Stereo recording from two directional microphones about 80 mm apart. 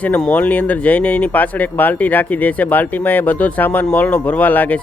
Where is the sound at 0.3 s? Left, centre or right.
Centre.